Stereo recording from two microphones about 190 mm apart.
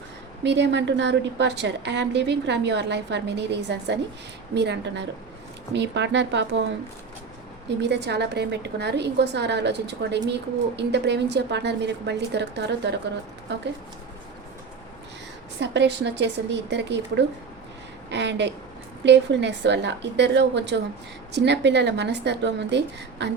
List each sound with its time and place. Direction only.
0.4 s a woman's voice: 65° right (ahead or behind)
7.8 s a woman's voice: 65° right (ahead or behind)
15.6 s a woman's voice: 65° right (ahead or behind)